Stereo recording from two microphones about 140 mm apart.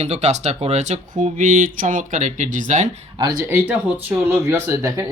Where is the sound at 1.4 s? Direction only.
70° right (ahead or behind).